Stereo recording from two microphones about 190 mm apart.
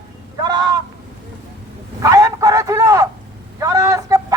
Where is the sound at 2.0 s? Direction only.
20° right (ahead or behind).